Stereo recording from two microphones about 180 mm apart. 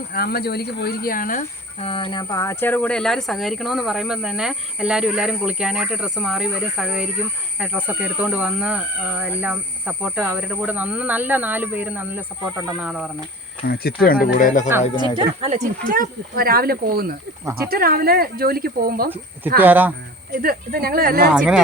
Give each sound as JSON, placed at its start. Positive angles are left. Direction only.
{"t": 0.1, "sound": "speech", "side_deg": 55}
{"t": 1.8, "sound": "speech", "side_deg": 30}
{"t": 13.7, "sound": "speech", "side_deg": 60}
{"t": 15.4, "sound": "speech", "side_deg": -40}
{"t": 19.1, "sound": "speech", "side_deg": -10}
{"t": 20.4, "sound": "speech", "side_deg": -55}
{"t": 21.3, "sound": "speech", "side_deg": -5}